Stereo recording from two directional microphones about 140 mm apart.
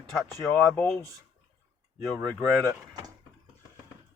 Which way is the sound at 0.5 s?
Centre (ahead or behind).